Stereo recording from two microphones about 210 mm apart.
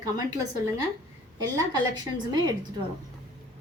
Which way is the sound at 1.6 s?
20° right (ahead or behind).